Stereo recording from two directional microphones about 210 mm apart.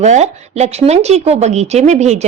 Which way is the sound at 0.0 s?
30° right (ahead or behind).